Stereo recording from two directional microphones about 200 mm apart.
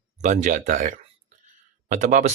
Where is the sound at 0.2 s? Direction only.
35° right (ahead or behind).